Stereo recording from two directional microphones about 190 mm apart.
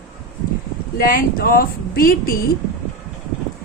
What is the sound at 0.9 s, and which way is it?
A woman's voice, 50° left (ahead or behind).